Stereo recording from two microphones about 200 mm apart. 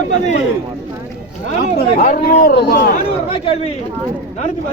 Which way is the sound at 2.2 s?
50° left (ahead or behind).